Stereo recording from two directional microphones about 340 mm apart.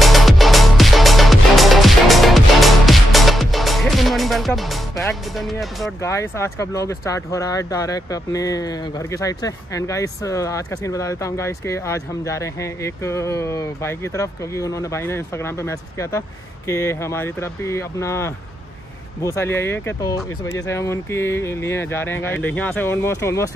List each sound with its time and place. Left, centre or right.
0.0 s music: centre
19.2 s speech: centre